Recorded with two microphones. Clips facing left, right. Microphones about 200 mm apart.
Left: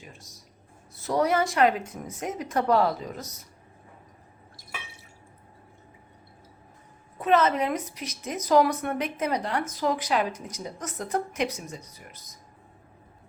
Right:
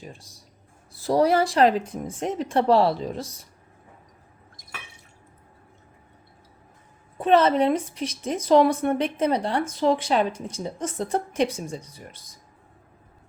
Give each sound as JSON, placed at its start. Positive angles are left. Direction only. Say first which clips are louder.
{"t": 0.0, "sound": "a woman's voice", "louder": "right 6 dB", "side_deg": -30}
{"t": 7.2, "sound": "a woman's voice", "louder": "right 4 dB", "side_deg": -30}